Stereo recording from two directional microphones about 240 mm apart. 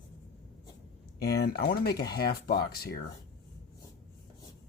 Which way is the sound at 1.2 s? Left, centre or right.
Left.